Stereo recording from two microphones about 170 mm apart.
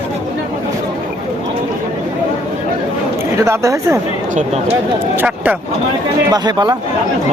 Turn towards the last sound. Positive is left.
turn(degrees=-25)  # may be behind; listen again after turning